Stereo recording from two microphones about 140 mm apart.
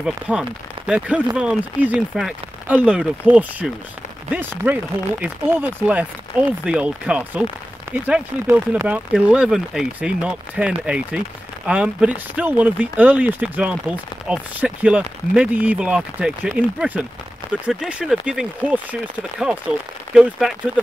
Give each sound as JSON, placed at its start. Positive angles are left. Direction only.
{"t": 0.0, "sound": "speech", "side_deg": -5}